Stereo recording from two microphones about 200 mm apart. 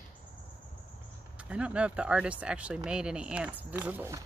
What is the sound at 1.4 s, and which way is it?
Speech, 5° right (ahead or behind).